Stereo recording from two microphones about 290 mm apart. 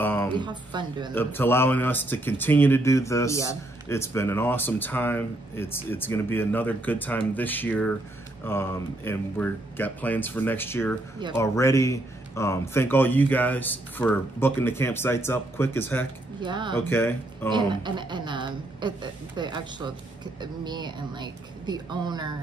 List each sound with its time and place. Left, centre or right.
0.0 s a sound: centre
0.3 s a woman's voice: centre
1.1 s speech: centre
16.3 s a woman's voice: centre
16.8 s speech: centre
17.5 s a woman's voice: centre